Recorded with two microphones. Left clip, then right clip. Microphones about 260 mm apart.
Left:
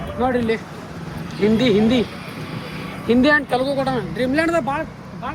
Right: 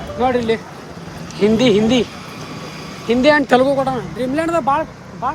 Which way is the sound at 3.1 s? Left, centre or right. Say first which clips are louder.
Right 4 dB; centre.